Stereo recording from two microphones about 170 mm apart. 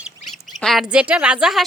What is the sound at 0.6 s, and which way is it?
A woman's voice, centre (ahead or behind).